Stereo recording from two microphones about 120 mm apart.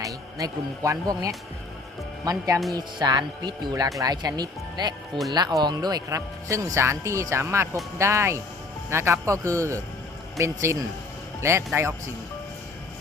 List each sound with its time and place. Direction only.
0.0 s speech: 30° right (ahead or behind)